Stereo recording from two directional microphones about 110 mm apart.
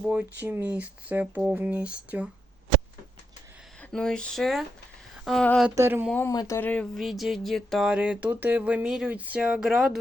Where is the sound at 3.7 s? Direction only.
5° left (ahead or behind).